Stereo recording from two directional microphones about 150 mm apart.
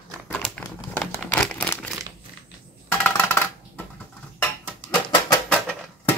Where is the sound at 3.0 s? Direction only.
10° left (ahead or behind).